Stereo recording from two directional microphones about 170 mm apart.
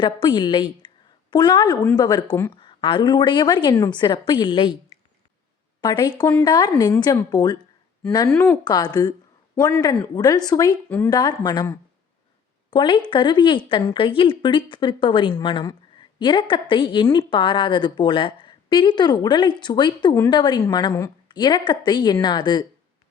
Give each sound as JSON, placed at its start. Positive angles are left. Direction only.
{"t": 0.0, "sound": "a woman's voice", "side_deg": 30}
{"t": 5.8, "sound": "a woman's voice", "side_deg": 25}
{"t": 10.8, "sound": "speech", "side_deg": 10}
{"t": 11.1, "sound": "a woman's voice", "side_deg": 25}